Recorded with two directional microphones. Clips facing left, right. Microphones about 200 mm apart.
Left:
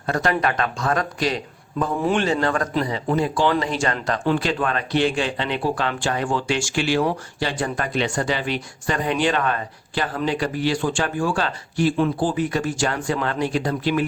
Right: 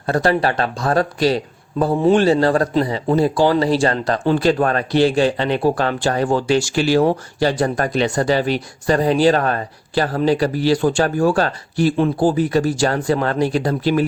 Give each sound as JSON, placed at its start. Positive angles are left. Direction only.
{"t": 0.0, "sound": "speech", "side_deg": -35}